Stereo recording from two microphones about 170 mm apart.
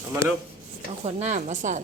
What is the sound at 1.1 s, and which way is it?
Speech, 40° right (ahead or behind).